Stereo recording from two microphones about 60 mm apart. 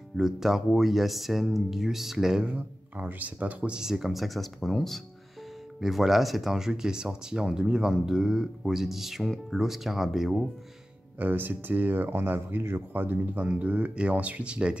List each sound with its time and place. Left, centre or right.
0.2 s speech: centre
3.0 s speech: right
3.7 s speech: centre
11.1 s speech: right